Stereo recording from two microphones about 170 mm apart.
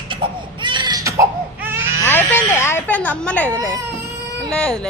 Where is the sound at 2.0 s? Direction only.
10° left (ahead or behind).